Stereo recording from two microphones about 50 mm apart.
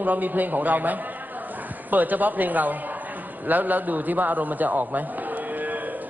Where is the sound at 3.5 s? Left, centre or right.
Right.